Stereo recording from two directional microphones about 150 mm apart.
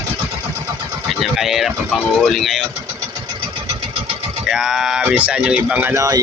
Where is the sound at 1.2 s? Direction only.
Centre (ahead or behind).